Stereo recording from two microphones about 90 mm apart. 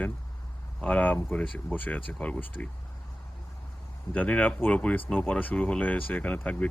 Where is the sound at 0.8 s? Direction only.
15° left (ahead or behind).